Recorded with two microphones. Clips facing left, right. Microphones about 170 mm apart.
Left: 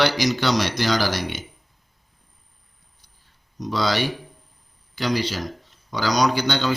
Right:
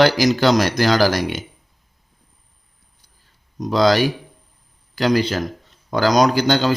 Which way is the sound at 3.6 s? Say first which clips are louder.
Right 7 dB; 45° right (ahead or behind).